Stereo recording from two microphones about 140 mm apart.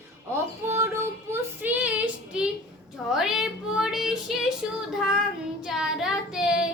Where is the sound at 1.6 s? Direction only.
10° right (ahead or behind).